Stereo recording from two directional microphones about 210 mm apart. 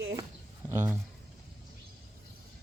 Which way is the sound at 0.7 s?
15° right (ahead or behind).